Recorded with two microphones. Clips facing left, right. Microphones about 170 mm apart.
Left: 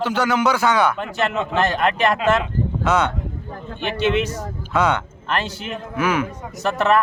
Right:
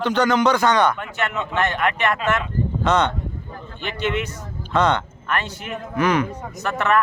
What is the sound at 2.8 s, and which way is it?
Speech, 5° left (ahead or behind).